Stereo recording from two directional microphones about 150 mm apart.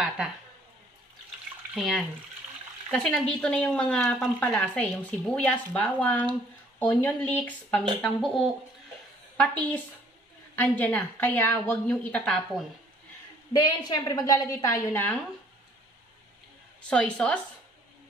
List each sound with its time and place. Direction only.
1.7 s a woman's voice: centre (ahead or behind)
8.0 s a woman's voice: centre (ahead or behind)
13.5 s a woman's voice: 30° left (ahead or behind)
16.9 s a woman's voice: 5° left (ahead or behind)